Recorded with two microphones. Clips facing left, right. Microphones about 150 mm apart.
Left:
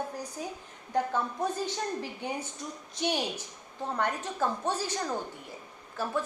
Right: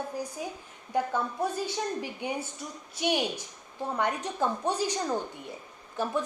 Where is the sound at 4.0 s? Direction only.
15° right (ahead or behind).